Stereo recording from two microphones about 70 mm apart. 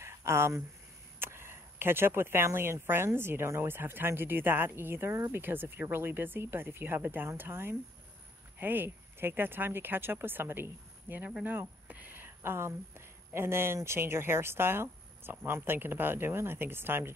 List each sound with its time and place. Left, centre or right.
0.0 s a sound: right
1.2 s speech: right
5.4 s speech: right